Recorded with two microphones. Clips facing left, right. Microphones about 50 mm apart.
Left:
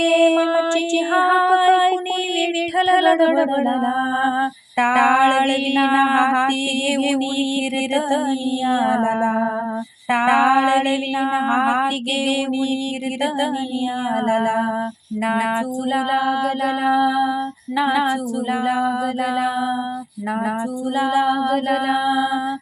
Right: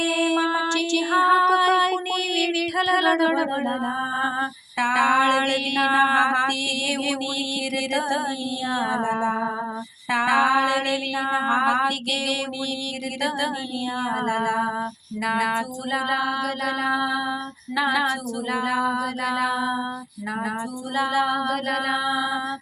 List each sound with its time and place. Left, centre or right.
0.0 s female singing: left
4.8 s female singing: left
7.9 s female singing: left
13.4 s female singing: left
15.3 s music: left
21.0 s music: centre